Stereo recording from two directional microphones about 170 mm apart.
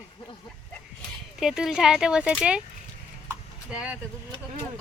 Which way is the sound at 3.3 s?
5° right (ahead or behind).